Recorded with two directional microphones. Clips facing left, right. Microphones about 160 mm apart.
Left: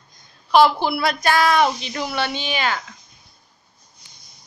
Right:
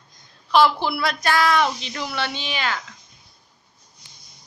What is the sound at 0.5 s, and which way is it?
A woman's voice, 50° left (ahead or behind).